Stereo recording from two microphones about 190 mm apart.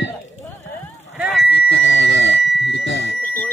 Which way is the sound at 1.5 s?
70° left (ahead or behind).